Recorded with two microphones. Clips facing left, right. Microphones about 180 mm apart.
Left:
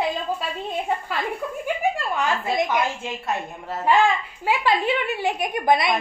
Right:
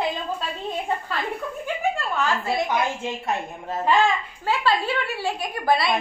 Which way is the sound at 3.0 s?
20° right (ahead or behind).